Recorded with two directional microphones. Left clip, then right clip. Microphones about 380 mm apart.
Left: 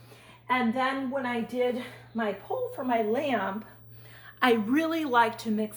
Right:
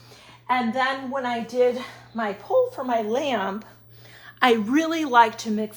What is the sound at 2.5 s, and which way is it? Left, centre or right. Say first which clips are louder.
Speech: right 15 dB; right.